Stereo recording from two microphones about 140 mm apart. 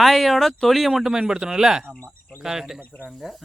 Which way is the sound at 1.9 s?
10° left (ahead or behind).